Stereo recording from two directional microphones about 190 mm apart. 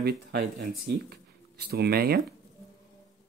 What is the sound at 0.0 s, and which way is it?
Speech, 60° right (ahead or behind).